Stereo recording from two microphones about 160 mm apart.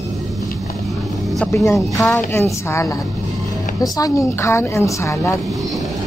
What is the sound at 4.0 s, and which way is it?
A woman's voice, 20° left (ahead or behind).